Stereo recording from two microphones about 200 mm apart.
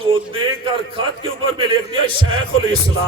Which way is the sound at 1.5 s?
25° right (ahead or behind).